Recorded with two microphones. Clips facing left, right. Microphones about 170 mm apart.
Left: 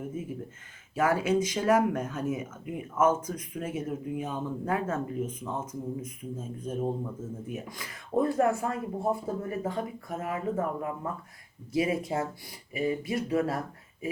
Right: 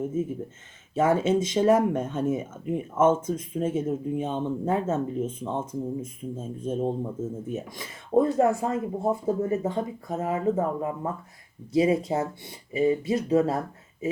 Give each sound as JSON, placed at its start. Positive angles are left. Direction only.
{"t": 0.0, "sound": "speech", "side_deg": -25}